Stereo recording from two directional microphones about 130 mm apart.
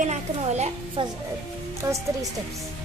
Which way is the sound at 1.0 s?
40° right (ahead or behind).